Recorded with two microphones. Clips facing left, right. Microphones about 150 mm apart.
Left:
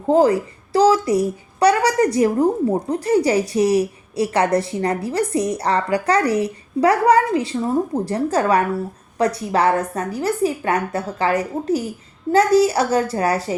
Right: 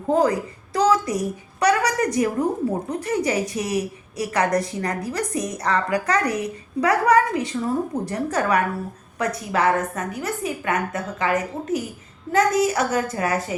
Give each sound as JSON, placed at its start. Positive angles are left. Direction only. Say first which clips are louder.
{"t": 0.1, "sound": "a woman's voice", "louder": "left 5 dB", "side_deg": 30}